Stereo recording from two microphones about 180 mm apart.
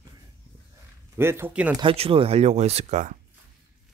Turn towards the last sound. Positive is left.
turn(degrees=-40)  # may be behind; listen again after turning